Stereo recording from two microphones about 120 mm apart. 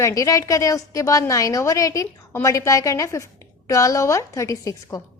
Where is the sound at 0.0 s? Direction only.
30° left (ahead or behind).